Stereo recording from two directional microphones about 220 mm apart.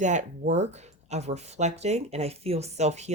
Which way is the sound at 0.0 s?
35° right (ahead or behind).